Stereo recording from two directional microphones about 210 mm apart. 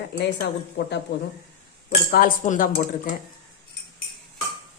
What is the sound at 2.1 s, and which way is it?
Speech, 45° left (ahead or behind).